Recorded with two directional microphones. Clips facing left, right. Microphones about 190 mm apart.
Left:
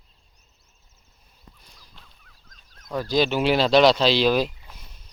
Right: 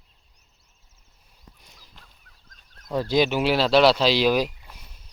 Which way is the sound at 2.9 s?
20° right (ahead or behind).